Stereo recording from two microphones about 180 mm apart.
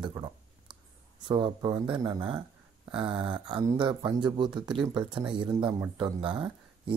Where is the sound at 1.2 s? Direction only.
25° right (ahead or behind).